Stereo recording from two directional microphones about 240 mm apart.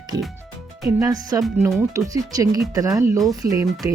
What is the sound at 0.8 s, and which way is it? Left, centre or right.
Speech, centre.